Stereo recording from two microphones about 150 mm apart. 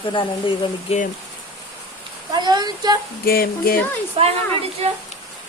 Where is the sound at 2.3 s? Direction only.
30° right (ahead or behind).